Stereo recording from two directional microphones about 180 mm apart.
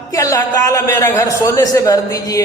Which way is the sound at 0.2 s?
20° left (ahead or behind).